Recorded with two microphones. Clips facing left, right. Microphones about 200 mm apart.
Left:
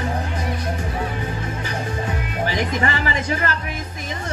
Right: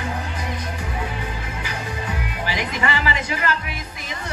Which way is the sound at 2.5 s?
40° left (ahead or behind).